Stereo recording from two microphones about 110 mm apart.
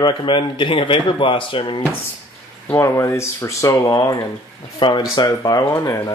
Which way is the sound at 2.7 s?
25° left (ahead or behind).